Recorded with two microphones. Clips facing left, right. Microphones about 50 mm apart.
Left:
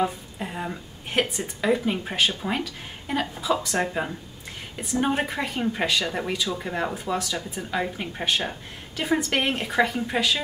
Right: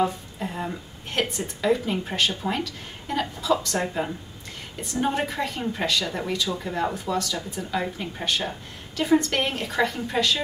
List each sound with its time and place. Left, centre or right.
0.0 s speech: centre
4.9 s a woman's voice: left